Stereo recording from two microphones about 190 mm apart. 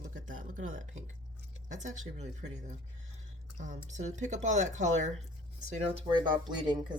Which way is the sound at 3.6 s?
40° right (ahead or behind).